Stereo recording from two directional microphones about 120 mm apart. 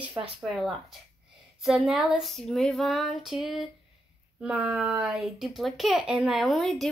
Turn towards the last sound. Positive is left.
turn(degrees=0)  # may be behind; listen again after turning